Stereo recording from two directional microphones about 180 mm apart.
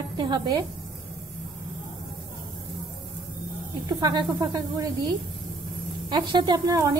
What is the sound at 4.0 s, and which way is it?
Speech, 20° right (ahead or behind).